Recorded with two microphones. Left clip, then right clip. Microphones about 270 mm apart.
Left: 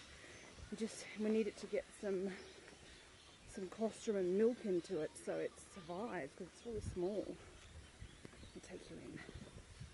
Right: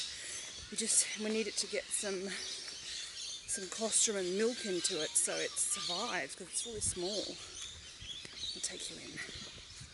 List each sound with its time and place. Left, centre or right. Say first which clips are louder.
0.7 s speech: right 10 dB; centre
3.5 s speech: right 3 dB; centre
3.9 s speech: right 5 dB; centre
7.0 s speech: right 3 dB; left